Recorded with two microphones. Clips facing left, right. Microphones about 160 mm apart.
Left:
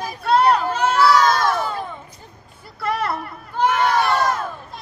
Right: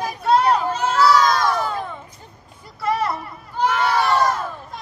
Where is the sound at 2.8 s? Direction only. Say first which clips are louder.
Right 1 dB; 60° left (ahead or behind).